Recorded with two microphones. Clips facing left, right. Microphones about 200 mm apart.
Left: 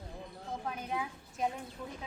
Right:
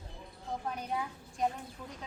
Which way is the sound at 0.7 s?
Centre (ahead or behind).